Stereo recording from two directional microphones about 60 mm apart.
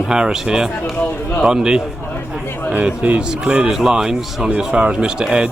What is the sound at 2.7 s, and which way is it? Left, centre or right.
A man's voice, right.